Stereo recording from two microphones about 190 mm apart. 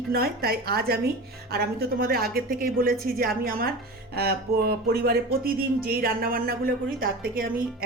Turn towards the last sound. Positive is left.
turn(degrees=-50)  # may be behind; listen again after turning